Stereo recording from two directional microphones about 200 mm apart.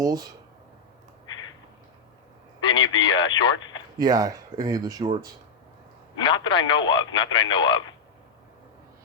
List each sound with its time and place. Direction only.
0.0 s speech: 20° right (ahead or behind)
2.6 s speech: 25° left (ahead or behind)
3.9 s speech: 20° right (ahead or behind)
6.1 s speech: 25° left (ahead or behind)